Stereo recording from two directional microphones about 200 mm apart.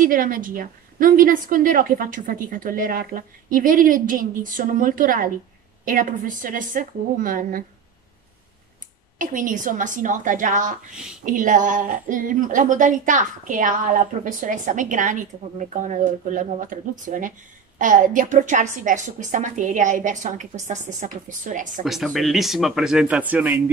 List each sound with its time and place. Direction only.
0.0 s a woman's voice: 45° right (ahead or behind)
9.2 s a woman's voice: 40° right (ahead or behind)
21.8 s speech: centre (ahead or behind)